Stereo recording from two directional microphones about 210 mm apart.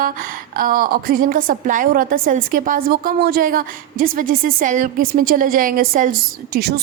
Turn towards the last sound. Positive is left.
turn(degrees=-45)  # may be behind; listen again after turning